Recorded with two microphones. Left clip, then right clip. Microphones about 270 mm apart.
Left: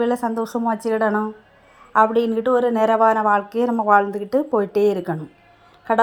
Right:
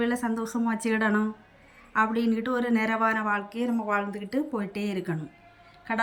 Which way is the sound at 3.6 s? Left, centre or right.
Left.